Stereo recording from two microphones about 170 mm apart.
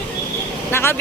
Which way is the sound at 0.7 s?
15° left (ahead or behind).